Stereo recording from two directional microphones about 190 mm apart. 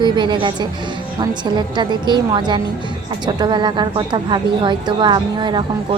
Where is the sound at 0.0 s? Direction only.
25° right (ahead or behind).